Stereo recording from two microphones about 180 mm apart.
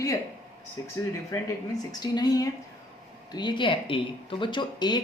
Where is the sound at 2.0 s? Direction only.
20° left (ahead or behind).